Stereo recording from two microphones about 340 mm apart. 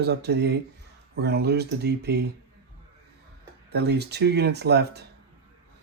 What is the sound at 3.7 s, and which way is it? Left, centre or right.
Speech, right.